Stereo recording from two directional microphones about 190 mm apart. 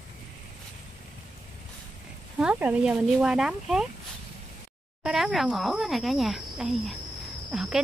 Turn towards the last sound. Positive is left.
turn(degrees=0)  # may be behind; listen again after turning